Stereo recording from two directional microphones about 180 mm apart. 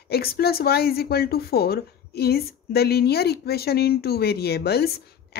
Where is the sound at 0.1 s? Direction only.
60° left (ahead or behind).